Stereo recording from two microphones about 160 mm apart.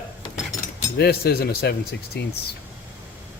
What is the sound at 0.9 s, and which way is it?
Speech, 80° left.